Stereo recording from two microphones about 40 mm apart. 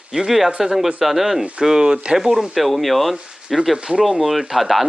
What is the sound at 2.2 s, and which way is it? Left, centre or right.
Speech, centre.